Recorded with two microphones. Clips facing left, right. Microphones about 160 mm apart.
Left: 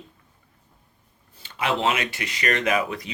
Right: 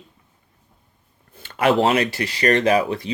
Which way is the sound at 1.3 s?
55° right (ahead or behind).